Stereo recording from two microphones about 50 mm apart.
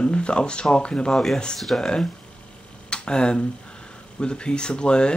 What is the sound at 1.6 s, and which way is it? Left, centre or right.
Speech, centre.